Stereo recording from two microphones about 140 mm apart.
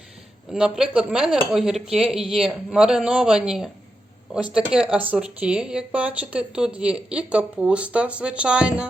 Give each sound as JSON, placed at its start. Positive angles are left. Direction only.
{"t": 0.5, "sound": "speech", "side_deg": -5}